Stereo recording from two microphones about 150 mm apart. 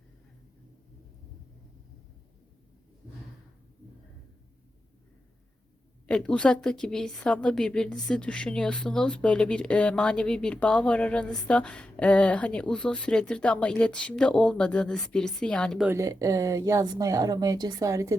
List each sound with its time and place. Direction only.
6.1 s a woman's voice: 5° left (ahead or behind)
15.8 s speech: 15° right (ahead or behind)